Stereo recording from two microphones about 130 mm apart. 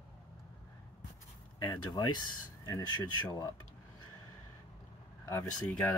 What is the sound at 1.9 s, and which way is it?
Speech, 35° left (ahead or behind).